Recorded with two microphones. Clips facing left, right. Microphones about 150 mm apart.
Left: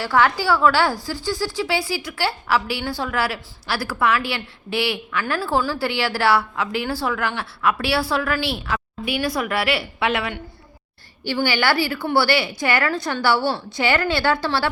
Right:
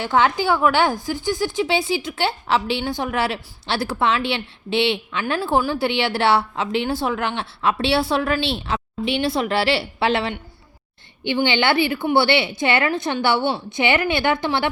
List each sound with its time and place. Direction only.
0.0 s a woman's voice: 20° right (ahead or behind)
11.2 s a woman's voice: 20° right (ahead or behind)